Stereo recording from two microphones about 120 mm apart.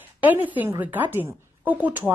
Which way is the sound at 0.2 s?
15° right (ahead or behind).